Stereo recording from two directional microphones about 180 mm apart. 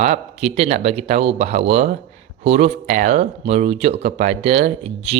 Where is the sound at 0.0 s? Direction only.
40° right (ahead or behind).